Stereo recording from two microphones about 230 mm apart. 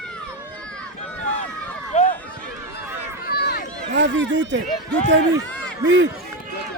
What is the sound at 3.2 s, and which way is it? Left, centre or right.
Run, left.